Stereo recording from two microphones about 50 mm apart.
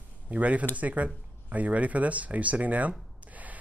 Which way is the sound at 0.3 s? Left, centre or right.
Right.